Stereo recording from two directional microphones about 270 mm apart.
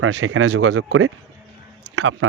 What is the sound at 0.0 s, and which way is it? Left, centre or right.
Speech, right.